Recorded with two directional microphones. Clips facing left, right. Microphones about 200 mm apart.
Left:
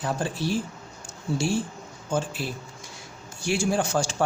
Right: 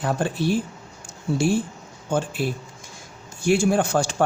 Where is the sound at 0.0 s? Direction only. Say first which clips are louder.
Right 4 dB; 60° right (ahead or behind).